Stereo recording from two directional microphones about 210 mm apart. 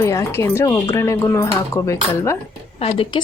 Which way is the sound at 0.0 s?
15° left (ahead or behind).